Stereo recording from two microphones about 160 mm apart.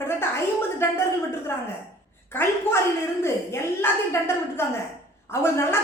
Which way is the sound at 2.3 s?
15° left (ahead or behind).